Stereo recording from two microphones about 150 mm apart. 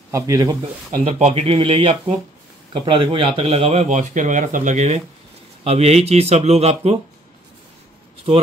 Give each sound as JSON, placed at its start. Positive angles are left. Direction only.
{"t": 0.1, "sound": "speech", "side_deg": -25}
{"t": 1.1, "sound": "a man's voice", "side_deg": -45}